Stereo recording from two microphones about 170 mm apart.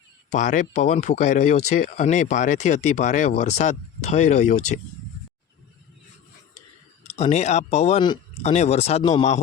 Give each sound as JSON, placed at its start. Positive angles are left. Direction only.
{"t": 0.3, "sound": "speech", "side_deg": 45}
{"t": 7.2, "sound": "speech", "side_deg": 40}